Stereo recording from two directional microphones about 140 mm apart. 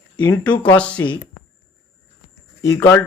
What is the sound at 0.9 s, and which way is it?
Speech, 35° left (ahead or behind).